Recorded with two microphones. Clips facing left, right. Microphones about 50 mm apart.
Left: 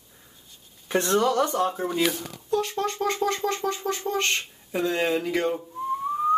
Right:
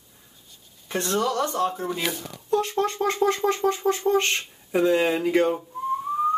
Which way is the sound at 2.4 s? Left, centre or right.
Centre.